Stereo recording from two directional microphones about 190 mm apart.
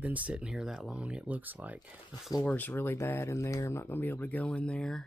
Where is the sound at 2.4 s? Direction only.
10° left (ahead or behind).